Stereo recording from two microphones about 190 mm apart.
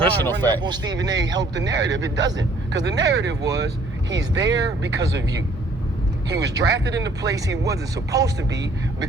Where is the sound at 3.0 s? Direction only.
65° right (ahead or behind).